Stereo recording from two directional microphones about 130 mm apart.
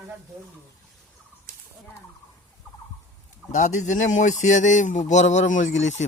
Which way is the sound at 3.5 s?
75° left (ahead or behind).